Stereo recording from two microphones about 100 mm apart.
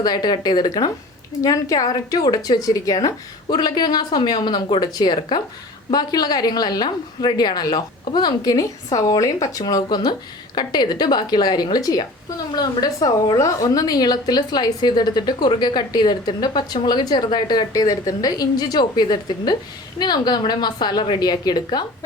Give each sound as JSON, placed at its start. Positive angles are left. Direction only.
{"t": 0.0, "sound": "a woman's voice", "side_deg": 45}